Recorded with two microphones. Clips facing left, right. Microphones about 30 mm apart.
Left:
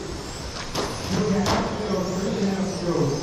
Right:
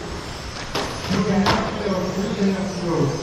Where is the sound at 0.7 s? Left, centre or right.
Right.